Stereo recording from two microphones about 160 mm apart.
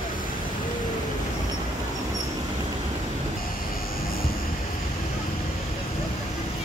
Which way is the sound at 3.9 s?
65° left (ahead or behind).